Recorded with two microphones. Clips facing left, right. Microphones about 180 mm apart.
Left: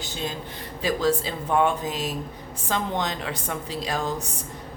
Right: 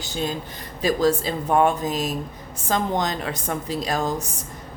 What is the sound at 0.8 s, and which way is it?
A woman's voice, 40° right (ahead or behind).